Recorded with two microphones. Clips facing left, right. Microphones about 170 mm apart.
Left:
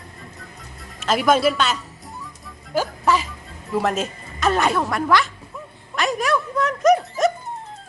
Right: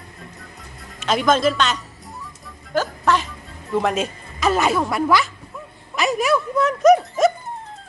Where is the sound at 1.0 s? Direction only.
5° left (ahead or behind).